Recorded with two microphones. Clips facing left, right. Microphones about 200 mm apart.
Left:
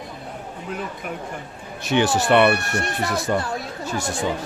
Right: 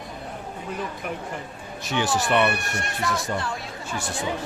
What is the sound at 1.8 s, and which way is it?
Speech, 65° left (ahead or behind).